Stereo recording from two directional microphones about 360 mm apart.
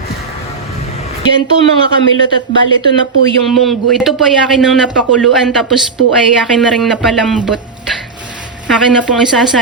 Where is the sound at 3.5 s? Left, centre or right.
Centre.